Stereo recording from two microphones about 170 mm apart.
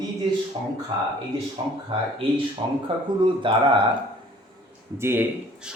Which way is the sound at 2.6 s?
30° right (ahead or behind).